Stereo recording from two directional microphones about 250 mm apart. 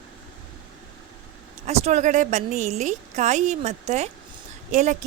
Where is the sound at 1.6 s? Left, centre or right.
Right.